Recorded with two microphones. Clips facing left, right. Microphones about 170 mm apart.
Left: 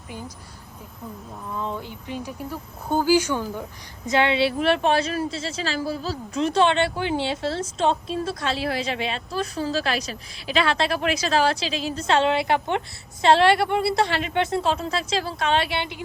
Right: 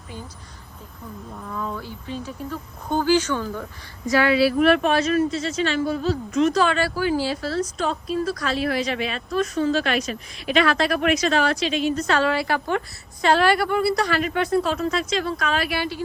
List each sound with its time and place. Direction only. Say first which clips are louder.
1.5 s a woman's voice: even; 25° left (ahead or behind)